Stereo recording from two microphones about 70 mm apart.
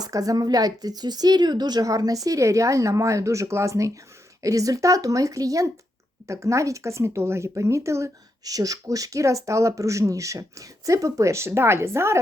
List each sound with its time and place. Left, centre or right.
0.0 s a woman's voice: right
8.4 s speech: right